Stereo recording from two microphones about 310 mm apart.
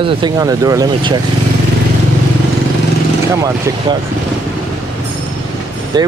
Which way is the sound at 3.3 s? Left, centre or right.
Centre.